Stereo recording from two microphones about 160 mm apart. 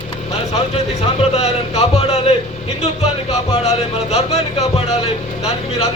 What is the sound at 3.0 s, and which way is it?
Music, 45° left (ahead or behind).